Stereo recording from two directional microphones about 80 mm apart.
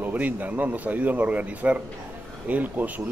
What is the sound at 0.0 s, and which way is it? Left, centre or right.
Speech, right.